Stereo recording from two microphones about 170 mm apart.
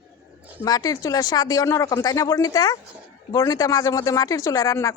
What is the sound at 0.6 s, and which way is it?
Speech, 20° left (ahead or behind).